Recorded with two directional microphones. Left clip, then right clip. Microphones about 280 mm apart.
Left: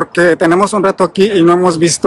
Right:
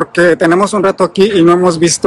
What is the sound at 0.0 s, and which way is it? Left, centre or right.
Speech, centre.